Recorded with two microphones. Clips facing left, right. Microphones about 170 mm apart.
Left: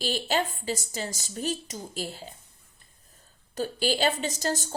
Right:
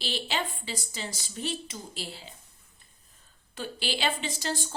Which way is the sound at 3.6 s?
40° left (ahead or behind).